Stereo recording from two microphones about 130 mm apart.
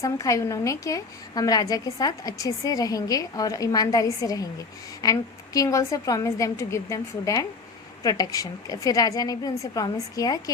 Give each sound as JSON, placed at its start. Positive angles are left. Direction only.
{"t": 0.0, "sound": "a woman's voice", "side_deg": 25}